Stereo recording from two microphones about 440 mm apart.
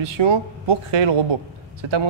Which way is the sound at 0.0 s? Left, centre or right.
Right.